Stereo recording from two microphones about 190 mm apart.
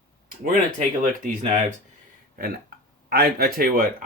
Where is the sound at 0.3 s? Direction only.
45° right (ahead or behind).